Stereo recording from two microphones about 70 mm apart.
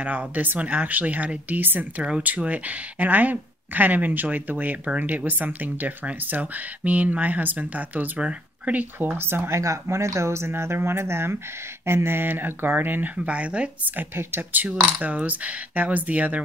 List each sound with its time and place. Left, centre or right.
0.0 s a woman's voice: right
9.6 s a woman's voice: right